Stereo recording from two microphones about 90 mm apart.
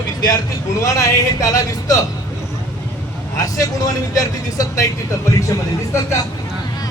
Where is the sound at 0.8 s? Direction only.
35° left (ahead or behind).